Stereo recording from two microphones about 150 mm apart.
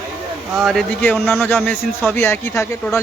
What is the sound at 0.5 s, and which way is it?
Speech, 5° right (ahead or behind).